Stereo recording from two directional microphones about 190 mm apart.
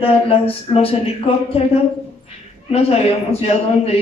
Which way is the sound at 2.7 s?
30° left (ahead or behind).